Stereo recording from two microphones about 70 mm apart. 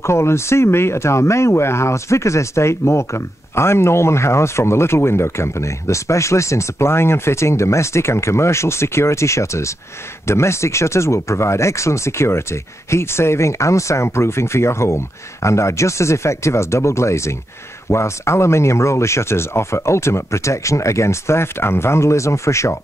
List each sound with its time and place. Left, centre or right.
0.0 s speech: left